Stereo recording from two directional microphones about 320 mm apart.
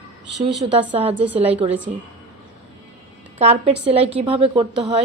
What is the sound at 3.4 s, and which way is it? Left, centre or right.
A woman's voice, centre.